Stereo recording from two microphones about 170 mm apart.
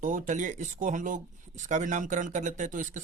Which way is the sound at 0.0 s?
50° right (ahead or behind).